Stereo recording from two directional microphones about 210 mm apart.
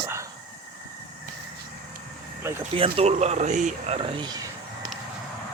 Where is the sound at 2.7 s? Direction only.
25° right (ahead or behind).